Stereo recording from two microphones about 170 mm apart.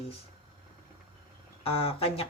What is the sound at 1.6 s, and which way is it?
Speech, 35° left (ahead or behind).